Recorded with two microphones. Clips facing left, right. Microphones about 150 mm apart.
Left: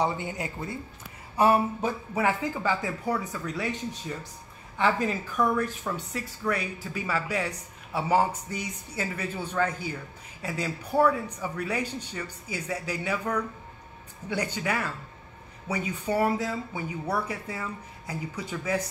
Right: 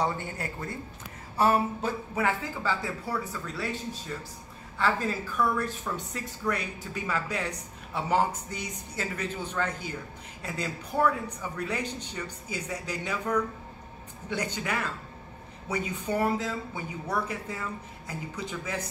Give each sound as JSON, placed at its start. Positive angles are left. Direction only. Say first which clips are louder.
{"t": 0.0, "sound": "speech", "louder": "left 2 dB", "side_deg": 15}
{"t": 4.7, "sound": "speech", "louder": "left 2 dB", "side_deg": 15}